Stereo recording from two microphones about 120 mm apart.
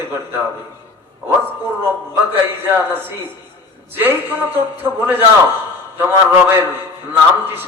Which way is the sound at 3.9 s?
15° right (ahead or behind).